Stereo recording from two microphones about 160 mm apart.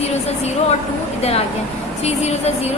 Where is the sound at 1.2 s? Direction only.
40° left (ahead or behind).